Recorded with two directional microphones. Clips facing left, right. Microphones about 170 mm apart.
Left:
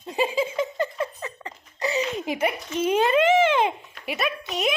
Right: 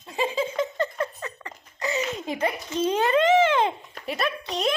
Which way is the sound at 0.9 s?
20° left (ahead or behind).